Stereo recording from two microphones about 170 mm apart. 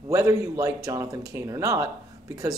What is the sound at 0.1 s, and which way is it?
Speech, 20° right (ahead or behind).